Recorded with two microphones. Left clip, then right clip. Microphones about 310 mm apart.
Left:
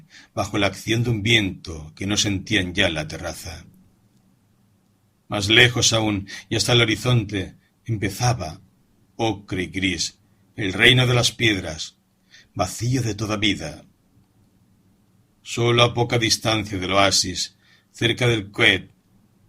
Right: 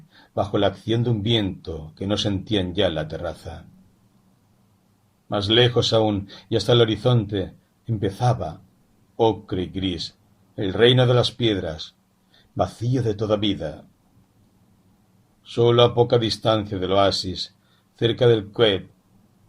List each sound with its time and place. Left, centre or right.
0.3 s speech: left
5.3 s speech: left
15.4 s speech: left